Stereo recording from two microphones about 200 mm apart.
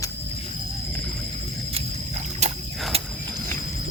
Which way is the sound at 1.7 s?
35° right (ahead or behind).